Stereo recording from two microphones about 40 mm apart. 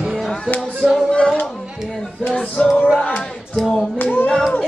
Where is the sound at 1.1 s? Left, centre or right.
Left.